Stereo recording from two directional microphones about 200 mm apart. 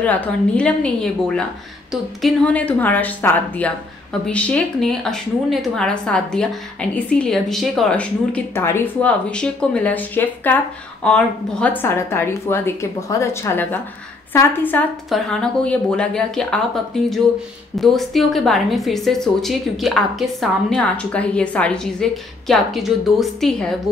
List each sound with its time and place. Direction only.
0.0 s a woman's voice: 10° left (ahead or behind)